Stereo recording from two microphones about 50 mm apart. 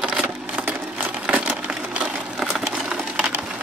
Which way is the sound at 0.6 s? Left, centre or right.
Right.